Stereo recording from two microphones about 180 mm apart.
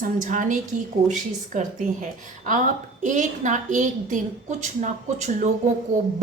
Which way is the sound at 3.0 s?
45° right (ahead or behind).